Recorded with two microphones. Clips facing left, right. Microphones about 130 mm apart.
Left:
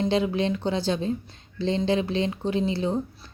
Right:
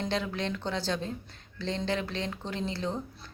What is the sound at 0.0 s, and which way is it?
Speech, 15° left (ahead or behind).